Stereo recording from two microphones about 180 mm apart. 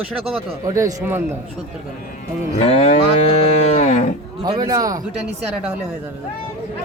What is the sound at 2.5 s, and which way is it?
Moo, 35° left (ahead or behind).